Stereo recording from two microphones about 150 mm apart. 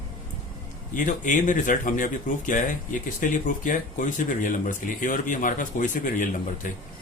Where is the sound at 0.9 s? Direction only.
60° left (ahead or behind).